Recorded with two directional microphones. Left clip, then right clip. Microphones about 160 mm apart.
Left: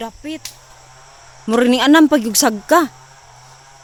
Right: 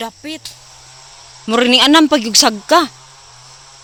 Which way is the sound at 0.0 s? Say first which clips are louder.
Right 2 dB; 40° right (ahead or behind).